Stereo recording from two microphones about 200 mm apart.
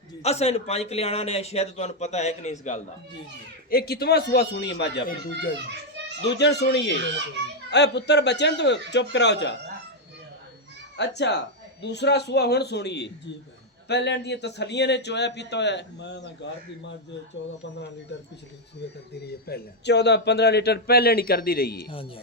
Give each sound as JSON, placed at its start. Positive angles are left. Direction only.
{"t": 0.2, "sound": "speech", "side_deg": 30}
{"t": 3.7, "sound": "a man's voice", "side_deg": 50}
{"t": 10.9, "sound": "a man's voice", "side_deg": 60}
{"t": 18.1, "sound": "a man's voice", "side_deg": 60}